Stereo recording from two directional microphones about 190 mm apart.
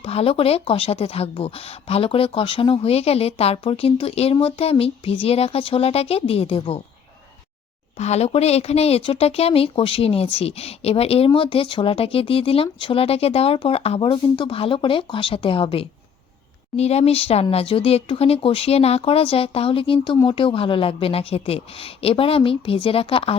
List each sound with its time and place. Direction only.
0.0 s speech: 30° left (ahead or behind)
7.9 s speech: 35° left (ahead or behind)